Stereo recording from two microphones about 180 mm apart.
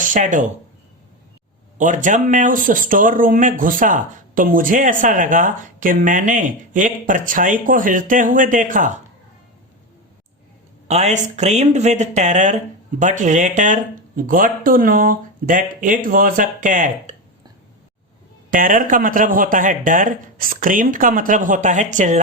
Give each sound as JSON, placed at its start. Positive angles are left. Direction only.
{"t": 0.0, "sound": "speech", "side_deg": -45}
{"t": 1.8, "sound": "speech", "side_deg": -45}
{"t": 10.8, "sound": "speech", "side_deg": -40}
{"t": 18.5, "sound": "speech", "side_deg": -50}